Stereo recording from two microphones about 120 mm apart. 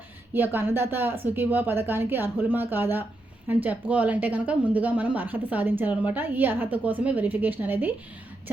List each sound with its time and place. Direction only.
0.3 s speech: 15° right (ahead or behind)